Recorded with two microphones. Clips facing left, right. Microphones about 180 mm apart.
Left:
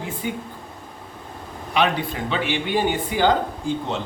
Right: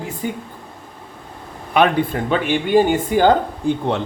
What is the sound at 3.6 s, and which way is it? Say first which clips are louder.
Speech: right 6 dB; 60° right (ahead or behind).